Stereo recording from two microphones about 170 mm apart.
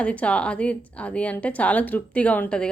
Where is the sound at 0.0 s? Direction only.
5° left (ahead or behind).